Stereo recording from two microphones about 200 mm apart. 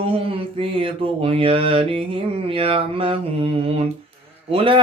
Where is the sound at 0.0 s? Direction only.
25° right (ahead or behind).